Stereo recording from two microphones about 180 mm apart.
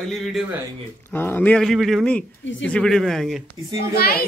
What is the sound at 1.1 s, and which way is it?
Speech, 10° left (ahead or behind).